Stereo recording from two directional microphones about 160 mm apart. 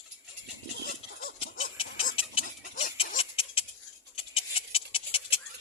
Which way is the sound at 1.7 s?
35° left (ahead or behind).